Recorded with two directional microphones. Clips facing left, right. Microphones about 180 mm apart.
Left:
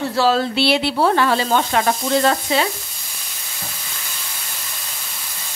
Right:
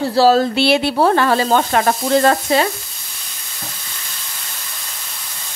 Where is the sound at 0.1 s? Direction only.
40° right (ahead or behind).